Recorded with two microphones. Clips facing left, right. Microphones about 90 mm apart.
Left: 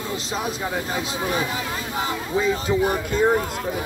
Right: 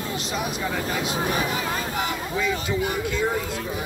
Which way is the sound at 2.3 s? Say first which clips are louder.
Left 5 dB; 35° left (ahead or behind).